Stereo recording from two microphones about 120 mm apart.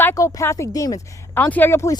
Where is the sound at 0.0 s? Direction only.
25° left (ahead or behind).